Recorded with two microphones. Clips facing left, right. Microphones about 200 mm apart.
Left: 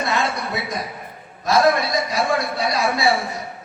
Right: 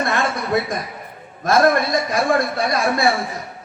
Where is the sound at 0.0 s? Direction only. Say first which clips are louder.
Right 2 dB; 50° right (ahead or behind).